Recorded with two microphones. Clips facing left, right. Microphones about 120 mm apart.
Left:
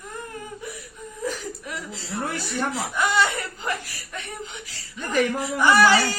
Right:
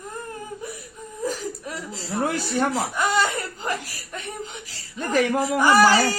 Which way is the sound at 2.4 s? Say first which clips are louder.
Right 4 dB; 35° right (ahead or behind).